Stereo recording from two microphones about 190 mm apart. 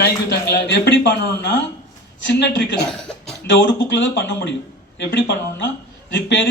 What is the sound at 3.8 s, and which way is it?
Speech, 70° left (ahead or behind).